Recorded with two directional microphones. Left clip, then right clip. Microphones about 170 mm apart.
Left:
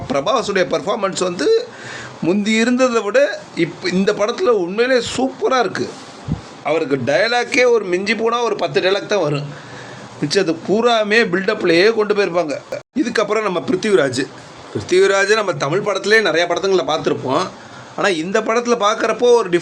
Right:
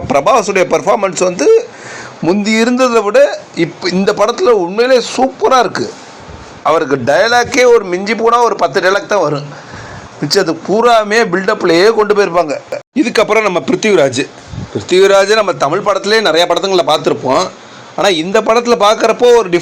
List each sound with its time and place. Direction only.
0.1 s a man's voice: 25° right (ahead or behind)
2.3 s speech: 5° left (ahead or behind)
3.1 s a man's voice: 15° right (ahead or behind)
7.3 s a man's voice: 10° left (ahead or behind)
11.9 s a man's voice: 5° right (ahead or behind)